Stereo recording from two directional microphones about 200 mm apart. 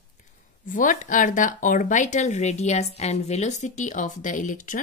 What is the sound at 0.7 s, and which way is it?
Speech, 40° left (ahead or behind).